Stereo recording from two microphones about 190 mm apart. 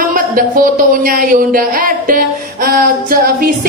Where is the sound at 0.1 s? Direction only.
50° right (ahead or behind).